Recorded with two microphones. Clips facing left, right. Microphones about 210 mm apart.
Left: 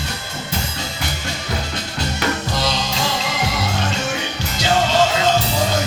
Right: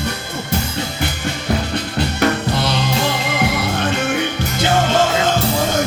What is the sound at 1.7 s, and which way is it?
Music, 60° right (ahead or behind).